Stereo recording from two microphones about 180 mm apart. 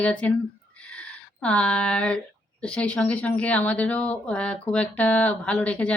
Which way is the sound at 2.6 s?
5° left (ahead or behind).